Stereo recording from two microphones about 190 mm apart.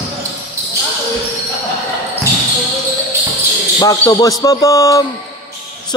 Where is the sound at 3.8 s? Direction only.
20° left (ahead or behind).